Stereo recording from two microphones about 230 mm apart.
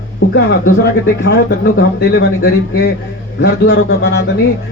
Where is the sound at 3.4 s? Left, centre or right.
Left.